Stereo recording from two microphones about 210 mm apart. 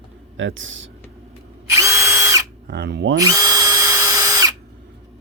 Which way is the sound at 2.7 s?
50° right (ahead or behind).